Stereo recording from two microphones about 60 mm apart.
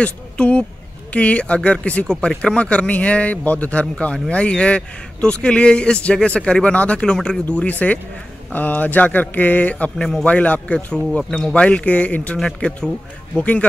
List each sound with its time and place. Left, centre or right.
0.0 s speech: left
11.1 s speech: centre
11.5 s speech: centre